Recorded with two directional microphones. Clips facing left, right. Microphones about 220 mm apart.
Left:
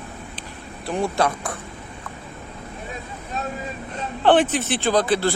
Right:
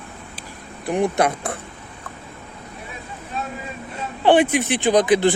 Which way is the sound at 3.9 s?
10° right (ahead or behind).